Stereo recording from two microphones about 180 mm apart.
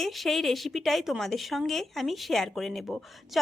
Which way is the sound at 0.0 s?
Centre (ahead or behind).